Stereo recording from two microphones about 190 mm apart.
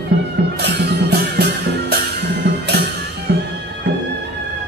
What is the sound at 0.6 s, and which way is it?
Music, 60° right (ahead or behind).